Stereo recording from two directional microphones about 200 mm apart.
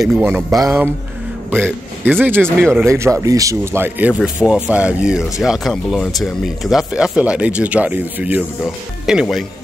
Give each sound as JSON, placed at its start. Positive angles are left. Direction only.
{"t": 0.0, "sound": "speech", "side_deg": -5}
{"t": 2.4, "sound": "speech", "side_deg": 5}
{"t": 2.8, "sound": "speech", "side_deg": -15}